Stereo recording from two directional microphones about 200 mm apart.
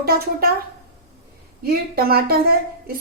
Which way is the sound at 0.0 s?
50° right (ahead or behind).